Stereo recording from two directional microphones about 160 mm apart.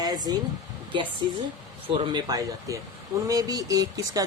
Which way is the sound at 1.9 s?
30° right (ahead or behind).